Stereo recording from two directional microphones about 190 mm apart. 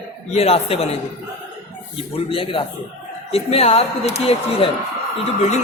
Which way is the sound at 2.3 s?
30° left (ahead or behind).